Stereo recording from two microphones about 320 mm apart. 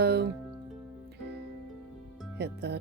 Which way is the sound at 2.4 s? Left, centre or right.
Right.